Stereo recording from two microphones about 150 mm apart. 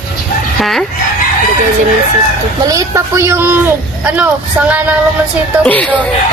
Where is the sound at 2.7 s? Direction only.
20° right (ahead or behind).